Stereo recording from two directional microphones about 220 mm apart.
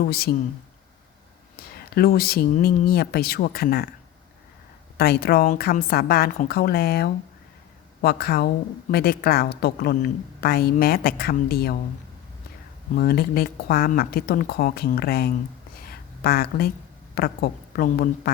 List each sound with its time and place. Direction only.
0.0 s a woman's voice: 45° left (ahead or behind)
1.5 s a woman's voice: 45° left (ahead or behind)
4.9 s a woman's voice: 45° left (ahead or behind)
13.0 s a woman's voice: 45° left (ahead or behind)
15.9 s a sound: 45° left (ahead or behind)
17.2 s a woman's voice: 40° left (ahead or behind)